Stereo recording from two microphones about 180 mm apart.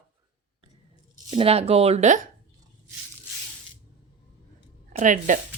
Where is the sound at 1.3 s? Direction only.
30° right (ahead or behind).